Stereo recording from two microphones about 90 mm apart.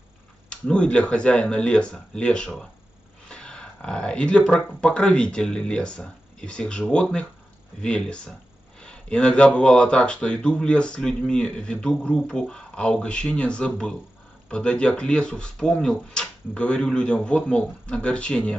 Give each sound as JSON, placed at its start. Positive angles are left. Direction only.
{"t": 0.5, "sound": "speech", "side_deg": 10}